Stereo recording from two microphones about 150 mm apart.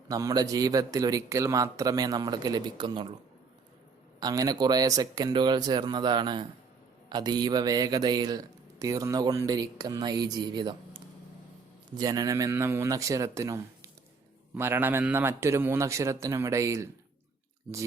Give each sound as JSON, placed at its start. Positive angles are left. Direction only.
{"t": 0.1, "sound": "speech", "side_deg": -25}
{"t": 4.2, "sound": "speech", "side_deg": -25}
{"t": 11.9, "sound": "a man's voice", "side_deg": -25}